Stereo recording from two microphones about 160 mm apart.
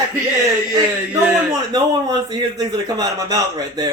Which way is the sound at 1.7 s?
25° right (ahead or behind).